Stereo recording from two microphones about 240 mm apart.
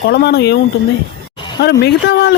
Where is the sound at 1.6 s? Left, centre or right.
Left.